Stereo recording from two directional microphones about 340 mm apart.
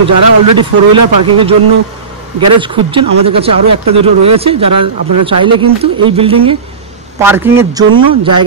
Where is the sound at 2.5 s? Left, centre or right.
Centre.